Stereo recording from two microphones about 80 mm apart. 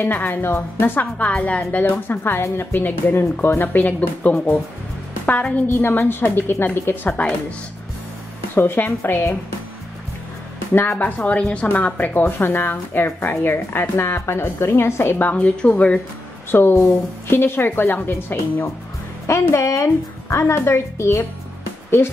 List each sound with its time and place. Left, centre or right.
0.0 s a woman's voice: left
8.5 s a woman's voice: left
10.7 s a woman's voice: left
16.5 s a woman's voice: left